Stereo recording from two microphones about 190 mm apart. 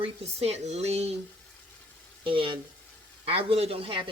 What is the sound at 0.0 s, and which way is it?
Speech, 30° right (ahead or behind).